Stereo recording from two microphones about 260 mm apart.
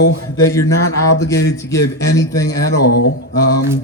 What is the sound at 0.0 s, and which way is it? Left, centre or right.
Speech, left.